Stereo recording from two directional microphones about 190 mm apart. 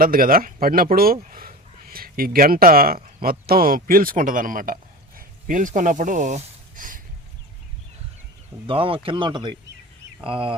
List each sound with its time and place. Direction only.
0.0 s speech: 50° right (ahead or behind)
8.6 s speech: 30° right (ahead or behind)